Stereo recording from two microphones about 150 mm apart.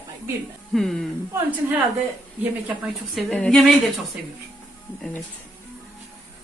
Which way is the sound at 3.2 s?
5° left (ahead or behind).